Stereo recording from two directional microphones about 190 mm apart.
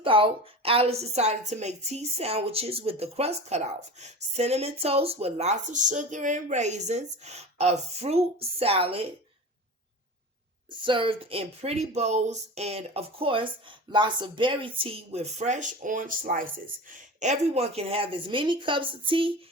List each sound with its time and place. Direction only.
0.0 s a woman's voice: 30° right (ahead or behind)
10.7 s a woman's voice: 25° right (ahead or behind)